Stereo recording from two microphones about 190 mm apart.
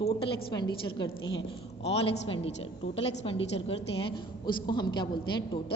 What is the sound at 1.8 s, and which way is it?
A woman's voice, 30° left (ahead or behind).